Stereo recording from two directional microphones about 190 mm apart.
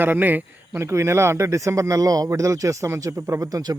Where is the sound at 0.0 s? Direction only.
10° right (ahead or behind).